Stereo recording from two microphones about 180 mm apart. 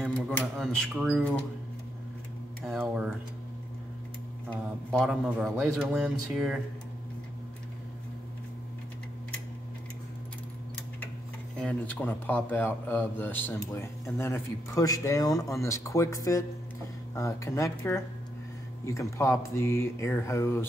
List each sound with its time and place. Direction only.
0.0 s speech: 5° left (ahead or behind)
2.6 s speech: 5° right (ahead or behind)
4.9 s speech: centre (ahead or behind)
11.6 s speech: 10° left (ahead or behind)